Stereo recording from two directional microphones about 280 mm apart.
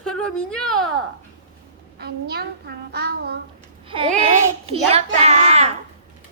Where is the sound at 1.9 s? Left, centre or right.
Right.